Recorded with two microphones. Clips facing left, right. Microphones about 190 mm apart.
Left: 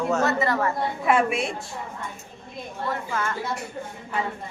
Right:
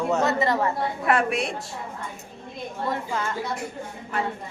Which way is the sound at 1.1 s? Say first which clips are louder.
Left 1 dB; centre (ahead or behind).